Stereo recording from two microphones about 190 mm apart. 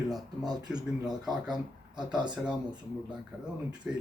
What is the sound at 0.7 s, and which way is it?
Speech, 5° right (ahead or behind).